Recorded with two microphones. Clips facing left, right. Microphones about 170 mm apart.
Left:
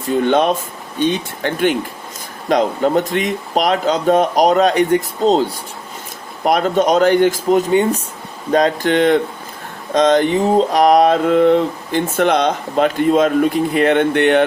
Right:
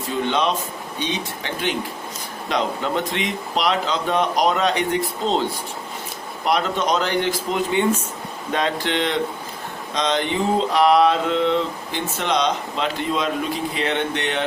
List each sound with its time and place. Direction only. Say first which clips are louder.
0.3 s speech: left 6 dB; 50° left (ahead or behind)